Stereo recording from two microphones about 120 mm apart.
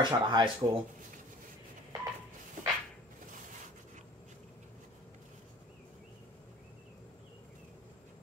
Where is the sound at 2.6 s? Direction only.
90° right.